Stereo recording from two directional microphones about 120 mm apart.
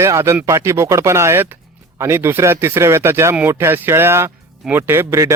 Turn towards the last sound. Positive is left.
turn(degrees=-25)  # may be behind; listen again after turning